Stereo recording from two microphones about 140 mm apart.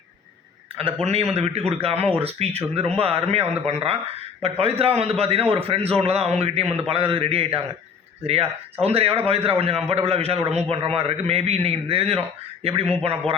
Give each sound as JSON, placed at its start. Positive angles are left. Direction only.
{"t": 1.0, "sound": "a man's voice", "side_deg": -50}
{"t": 8.8, "sound": "a man's voice", "side_deg": -45}